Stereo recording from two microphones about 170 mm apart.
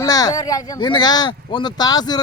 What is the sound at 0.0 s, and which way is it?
A man's voice, 20° left (ahead or behind).